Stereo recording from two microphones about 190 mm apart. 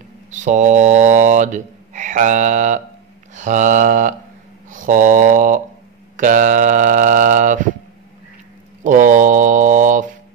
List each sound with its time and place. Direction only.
0.3 s speech: 40° right (ahead or behind)
8.8 s speech: 40° right (ahead or behind)